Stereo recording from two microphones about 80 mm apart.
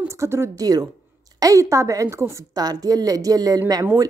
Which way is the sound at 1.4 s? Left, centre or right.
Right.